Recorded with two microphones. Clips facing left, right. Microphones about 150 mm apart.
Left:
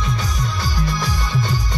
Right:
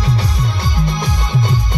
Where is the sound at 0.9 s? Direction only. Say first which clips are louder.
Right 3 dB; 20° right (ahead or behind).